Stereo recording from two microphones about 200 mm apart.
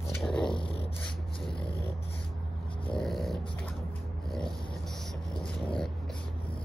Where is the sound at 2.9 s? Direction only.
Centre (ahead or behind).